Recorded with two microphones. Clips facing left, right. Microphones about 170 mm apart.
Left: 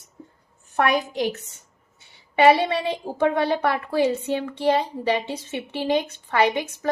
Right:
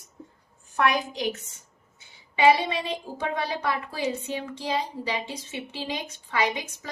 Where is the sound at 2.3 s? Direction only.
60° left (ahead or behind).